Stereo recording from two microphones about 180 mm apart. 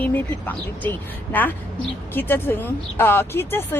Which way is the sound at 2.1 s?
10° left (ahead or behind).